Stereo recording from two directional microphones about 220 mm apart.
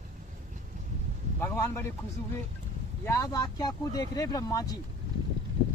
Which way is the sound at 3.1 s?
15° left (ahead or behind).